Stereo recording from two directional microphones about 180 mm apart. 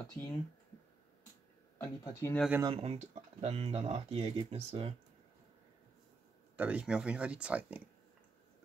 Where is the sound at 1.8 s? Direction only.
15° left (ahead or behind).